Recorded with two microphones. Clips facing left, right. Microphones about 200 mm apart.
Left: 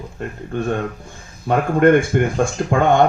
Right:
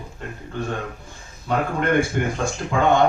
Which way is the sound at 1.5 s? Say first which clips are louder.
Left 8 dB; 50° left (ahead or behind).